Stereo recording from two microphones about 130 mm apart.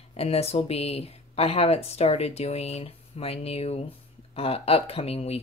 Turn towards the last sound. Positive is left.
turn(degrees=50)  # may be behind; listen again after turning